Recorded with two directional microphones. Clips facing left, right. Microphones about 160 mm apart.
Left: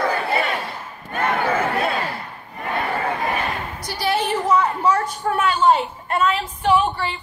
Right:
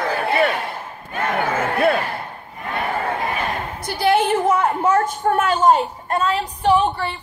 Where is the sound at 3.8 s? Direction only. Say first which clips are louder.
Right 6 dB; 55° right (ahead or behind).